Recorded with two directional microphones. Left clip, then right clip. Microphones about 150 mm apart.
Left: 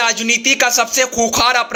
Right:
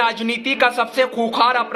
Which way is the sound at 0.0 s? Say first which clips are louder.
Left 4 dB; 15° left (ahead or behind).